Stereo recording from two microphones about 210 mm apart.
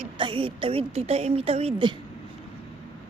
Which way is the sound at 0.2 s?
25° right (ahead or behind).